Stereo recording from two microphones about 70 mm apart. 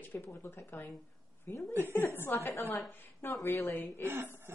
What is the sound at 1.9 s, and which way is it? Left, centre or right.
A woman's voice, left.